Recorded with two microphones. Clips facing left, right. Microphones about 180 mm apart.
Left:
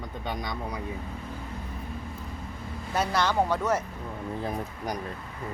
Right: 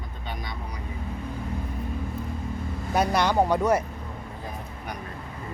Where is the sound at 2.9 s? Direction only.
15° right (ahead or behind).